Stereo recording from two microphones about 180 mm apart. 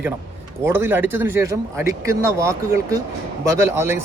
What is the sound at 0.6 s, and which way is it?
A man's voice, 15° right (ahead or behind).